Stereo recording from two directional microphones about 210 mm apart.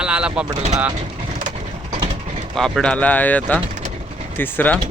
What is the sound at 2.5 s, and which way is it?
Speech, 5° left (ahead or behind).